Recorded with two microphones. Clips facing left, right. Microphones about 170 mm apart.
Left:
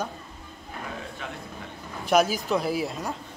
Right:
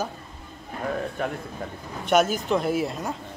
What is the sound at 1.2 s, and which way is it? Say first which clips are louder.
Speech: right 11 dB; 50° right (ahead or behind).